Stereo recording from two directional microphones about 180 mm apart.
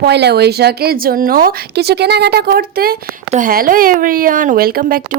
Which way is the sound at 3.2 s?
45° right (ahead or behind).